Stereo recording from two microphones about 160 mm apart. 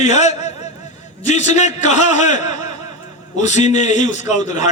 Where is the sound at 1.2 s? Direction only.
45° left (ahead or behind).